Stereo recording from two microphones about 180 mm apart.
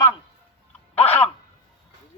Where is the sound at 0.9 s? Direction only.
10° left (ahead or behind).